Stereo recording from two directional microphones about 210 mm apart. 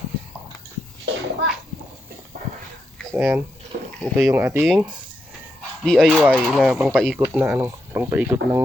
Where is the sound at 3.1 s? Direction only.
10° right (ahead or behind).